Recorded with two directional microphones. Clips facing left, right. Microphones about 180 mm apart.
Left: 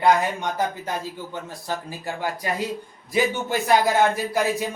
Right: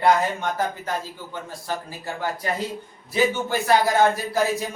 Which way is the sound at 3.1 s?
15° left (ahead or behind).